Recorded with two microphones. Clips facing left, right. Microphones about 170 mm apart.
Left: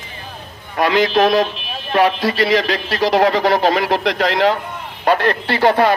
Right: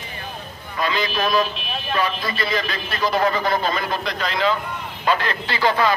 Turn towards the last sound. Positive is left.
turn(degrees=65)  # may be behind; listen again after turning